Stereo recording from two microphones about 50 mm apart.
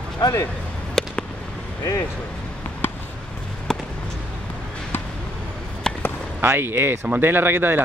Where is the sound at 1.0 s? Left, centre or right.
Centre.